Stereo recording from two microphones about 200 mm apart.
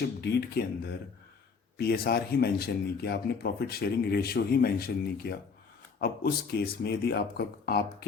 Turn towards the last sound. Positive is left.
turn(degrees=50)  # may be behind; listen again after turning